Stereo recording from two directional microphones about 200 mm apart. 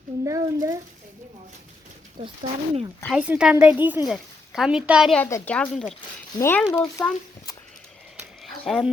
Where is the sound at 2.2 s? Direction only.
25° right (ahead or behind).